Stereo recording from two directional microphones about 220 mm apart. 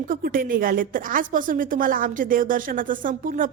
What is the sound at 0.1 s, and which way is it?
A woman's voice, 40° right (ahead or behind).